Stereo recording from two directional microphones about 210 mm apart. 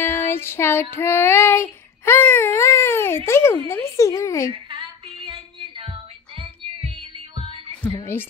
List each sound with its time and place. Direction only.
0.0 s child singing: 10° left (ahead or behind)
4.5 s a sound: 25° right (ahead or behind)
7.8 s a woman's voice: 10° left (ahead or behind)